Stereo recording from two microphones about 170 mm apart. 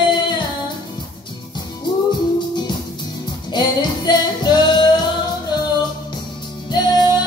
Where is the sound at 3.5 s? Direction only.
25° left (ahead or behind).